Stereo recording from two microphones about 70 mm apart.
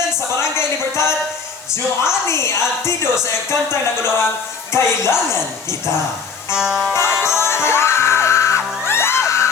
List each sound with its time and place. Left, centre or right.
0.3 s music: left
2.2 s a woman's voice: left
6.6 s music: centre
6.9 s music: left